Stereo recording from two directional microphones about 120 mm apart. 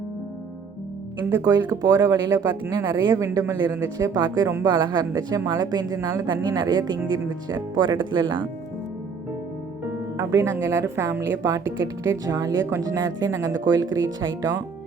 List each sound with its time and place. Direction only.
1.5 s speech: 35° right (ahead or behind)
10.2 s a woman's voice: 25° right (ahead or behind)